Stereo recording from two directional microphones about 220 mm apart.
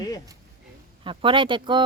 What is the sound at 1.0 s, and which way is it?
Speech, 20° right (ahead or behind).